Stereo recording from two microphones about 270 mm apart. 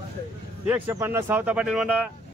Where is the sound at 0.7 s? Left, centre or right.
Centre.